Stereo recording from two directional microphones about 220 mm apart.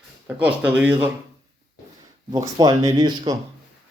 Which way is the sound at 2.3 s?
20° right (ahead or behind).